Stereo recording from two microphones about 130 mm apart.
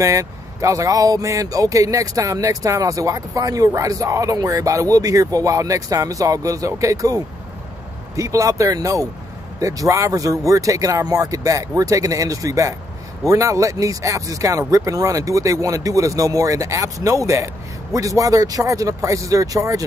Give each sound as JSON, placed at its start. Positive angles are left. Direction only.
{"t": 0.0, "sound": "speech", "side_deg": -25}